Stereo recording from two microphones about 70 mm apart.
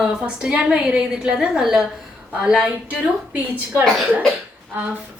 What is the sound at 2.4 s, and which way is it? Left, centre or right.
Speech, centre.